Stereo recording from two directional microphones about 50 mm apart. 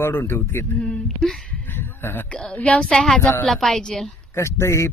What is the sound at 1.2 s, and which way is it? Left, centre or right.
Speech, centre.